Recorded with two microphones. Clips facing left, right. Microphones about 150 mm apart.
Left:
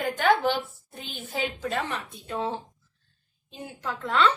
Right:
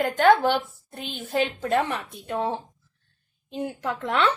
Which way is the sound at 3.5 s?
65° right (ahead or behind).